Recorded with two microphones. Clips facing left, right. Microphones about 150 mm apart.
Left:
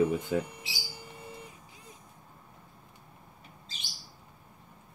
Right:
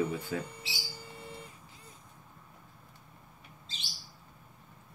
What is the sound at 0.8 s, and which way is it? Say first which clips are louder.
Bird: left 1 dB; 15° left (ahead or behind).